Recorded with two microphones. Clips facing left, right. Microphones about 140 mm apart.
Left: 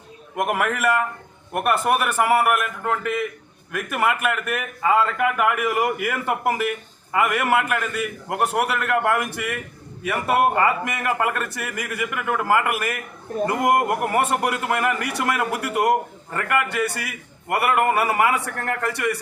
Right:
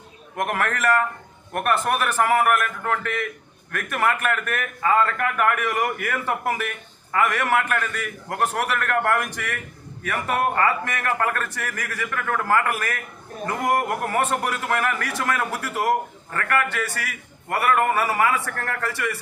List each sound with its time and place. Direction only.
0.3 s a man's voice: 10° left (ahead or behind)